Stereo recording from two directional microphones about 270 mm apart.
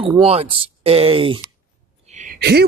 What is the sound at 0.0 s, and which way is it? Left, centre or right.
Speech, centre.